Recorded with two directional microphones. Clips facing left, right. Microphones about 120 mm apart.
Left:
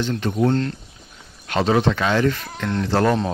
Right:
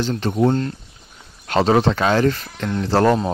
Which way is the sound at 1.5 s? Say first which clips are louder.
Right 2 dB; 35° right (ahead or behind).